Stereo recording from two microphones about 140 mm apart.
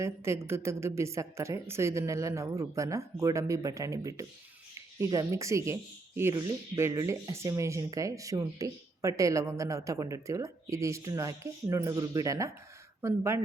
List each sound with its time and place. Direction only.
0.0 s speech: 20° right (ahead or behind)